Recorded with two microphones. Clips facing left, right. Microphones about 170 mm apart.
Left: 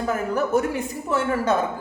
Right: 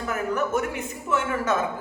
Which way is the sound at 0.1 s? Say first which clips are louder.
Left 3 dB; 35° left (ahead or behind).